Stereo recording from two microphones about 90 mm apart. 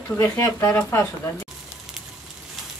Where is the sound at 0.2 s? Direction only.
30° left (ahead or behind).